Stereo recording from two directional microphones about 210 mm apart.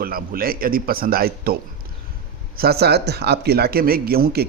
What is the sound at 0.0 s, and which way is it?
A man's voice, 45° right (ahead or behind).